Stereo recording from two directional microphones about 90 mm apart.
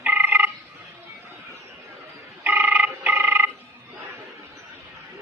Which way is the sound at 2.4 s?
20° right (ahead or behind).